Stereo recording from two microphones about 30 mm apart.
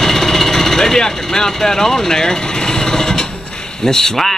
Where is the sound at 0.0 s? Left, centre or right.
Centre.